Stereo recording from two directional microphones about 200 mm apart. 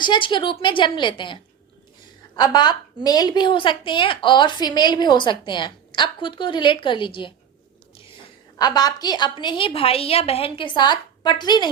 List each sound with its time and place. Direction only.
0.0 s a woman's voice: 25° left (ahead or behind)
8.5 s a woman's voice: 20° left (ahead or behind)